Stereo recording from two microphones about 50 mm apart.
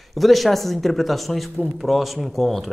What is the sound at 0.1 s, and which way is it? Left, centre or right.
Speech, centre.